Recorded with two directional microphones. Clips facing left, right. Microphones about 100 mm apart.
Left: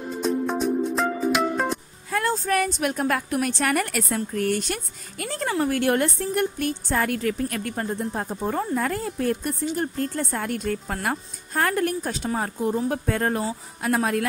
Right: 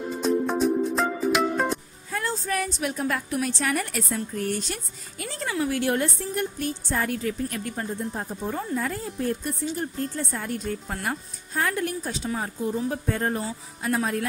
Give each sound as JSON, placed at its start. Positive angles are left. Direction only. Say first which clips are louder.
{"t": 0.2, "sound": "music", "louder": "right 1 dB", "side_deg": 0}
{"t": 2.1, "sound": "a woman's voice", "louder": "left 5 dB", "side_deg": 55}
{"t": 5.2, "sound": "a woman's voice", "louder": "left 3 dB", "side_deg": 50}
{"t": 12.9, "sound": "speech", "louder": "left 3 dB", "side_deg": 75}